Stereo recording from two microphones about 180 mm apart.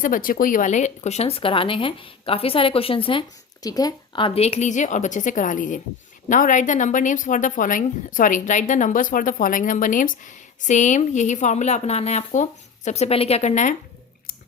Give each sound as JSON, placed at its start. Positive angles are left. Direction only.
{"t": 0.0, "sound": "a woman's voice", "side_deg": 50}